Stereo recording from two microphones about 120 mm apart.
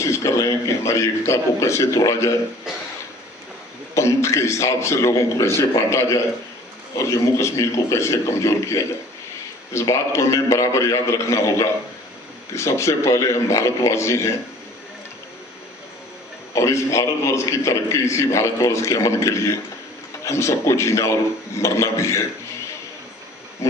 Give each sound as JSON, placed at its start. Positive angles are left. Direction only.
{"t": 0.0, "sound": "a man's voice", "side_deg": 25}
{"t": 3.9, "sound": "a man's voice", "side_deg": 25}
{"t": 16.6, "sound": "a man's voice", "side_deg": 25}